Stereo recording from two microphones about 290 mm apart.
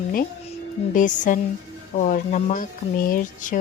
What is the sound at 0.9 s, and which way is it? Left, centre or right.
Speech, left.